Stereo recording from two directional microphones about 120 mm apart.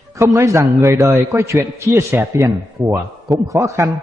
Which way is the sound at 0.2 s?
25° right (ahead or behind).